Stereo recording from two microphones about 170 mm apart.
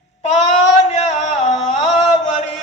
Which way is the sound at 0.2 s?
40° left (ahead or behind).